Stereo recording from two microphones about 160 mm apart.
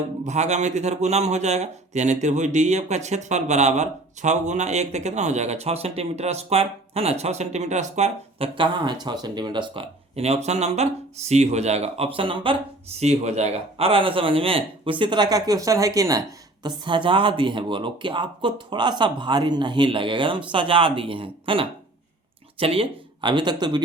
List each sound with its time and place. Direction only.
0.3 s speech: 45° right (ahead or behind)
8.5 s speech: 30° right (ahead or behind)